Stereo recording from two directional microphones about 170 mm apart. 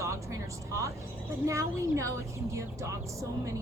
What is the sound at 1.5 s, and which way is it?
Speech, 20° right (ahead or behind).